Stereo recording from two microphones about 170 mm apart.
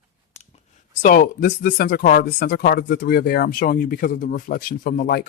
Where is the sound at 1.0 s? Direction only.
55° left (ahead or behind).